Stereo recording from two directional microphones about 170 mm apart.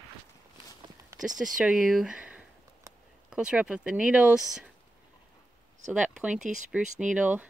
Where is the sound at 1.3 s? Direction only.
50° right (ahead or behind).